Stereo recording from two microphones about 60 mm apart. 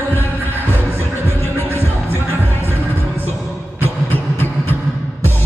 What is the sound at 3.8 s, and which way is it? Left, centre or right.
Vehicle, left.